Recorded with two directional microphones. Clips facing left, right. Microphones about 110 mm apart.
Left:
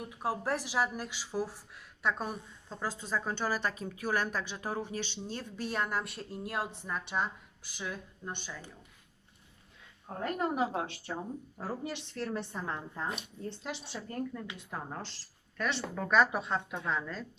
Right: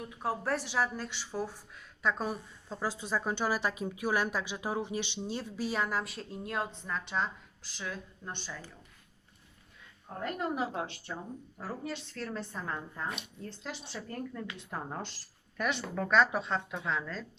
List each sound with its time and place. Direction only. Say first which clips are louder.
0.0 s speech: even; 10° left (ahead or behind)
10.1 s a woman's voice: left 1 dB; 35° left (ahead or behind)
11.5 s a woman's voice: even; 20° left (ahead or behind)
14.7 s speech: right 1 dB; centre (ahead or behind)